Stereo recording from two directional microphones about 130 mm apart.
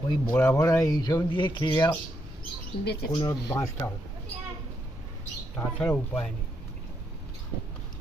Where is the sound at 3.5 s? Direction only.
25° left (ahead or behind).